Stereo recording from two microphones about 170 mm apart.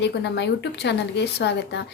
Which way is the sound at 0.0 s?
90° left.